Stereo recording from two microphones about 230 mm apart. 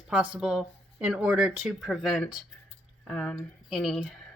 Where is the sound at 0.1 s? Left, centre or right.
Centre.